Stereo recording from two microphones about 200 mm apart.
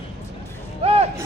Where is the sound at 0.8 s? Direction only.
30° right (ahead or behind).